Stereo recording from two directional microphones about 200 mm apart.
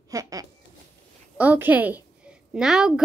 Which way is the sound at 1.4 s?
10° right (ahead or behind).